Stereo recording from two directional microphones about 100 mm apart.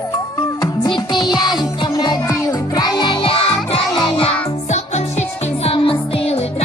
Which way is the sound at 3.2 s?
70° left (ahead or behind).